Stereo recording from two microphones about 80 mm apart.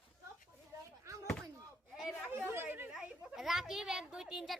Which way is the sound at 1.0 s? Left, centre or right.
Right.